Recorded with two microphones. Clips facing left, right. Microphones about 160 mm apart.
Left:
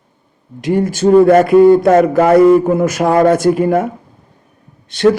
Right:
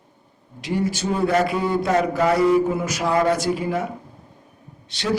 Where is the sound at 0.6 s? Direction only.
50° left (ahead or behind).